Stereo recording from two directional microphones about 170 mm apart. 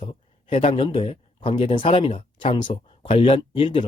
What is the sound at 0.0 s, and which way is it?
Speech, 35° left (ahead or behind).